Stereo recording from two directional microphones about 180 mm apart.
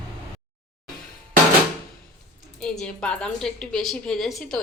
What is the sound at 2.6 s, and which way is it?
A woman's voice, 5° left (ahead or behind).